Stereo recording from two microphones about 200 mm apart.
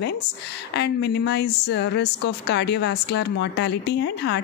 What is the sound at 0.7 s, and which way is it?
A woman's voice, 55° left (ahead or behind).